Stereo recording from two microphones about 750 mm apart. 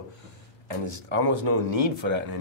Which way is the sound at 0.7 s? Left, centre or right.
Right.